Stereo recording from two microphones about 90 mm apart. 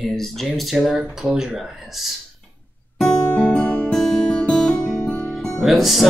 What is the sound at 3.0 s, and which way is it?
Music, 10° left (ahead or behind).